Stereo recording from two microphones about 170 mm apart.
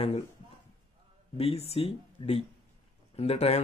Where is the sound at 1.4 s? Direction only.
35° left (ahead or behind).